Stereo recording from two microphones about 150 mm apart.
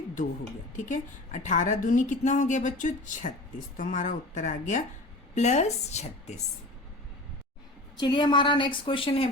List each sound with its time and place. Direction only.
0.8 s a woman's voice: 55° left (ahead or behind)
7.9 s a woman's voice: 30° left (ahead or behind)